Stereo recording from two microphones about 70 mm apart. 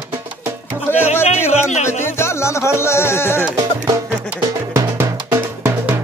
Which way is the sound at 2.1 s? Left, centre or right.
Left.